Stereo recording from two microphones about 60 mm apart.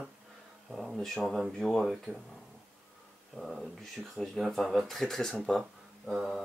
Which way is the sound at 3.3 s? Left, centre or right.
Centre.